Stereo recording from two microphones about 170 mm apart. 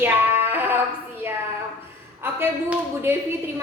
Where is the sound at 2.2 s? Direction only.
15° right (ahead or behind).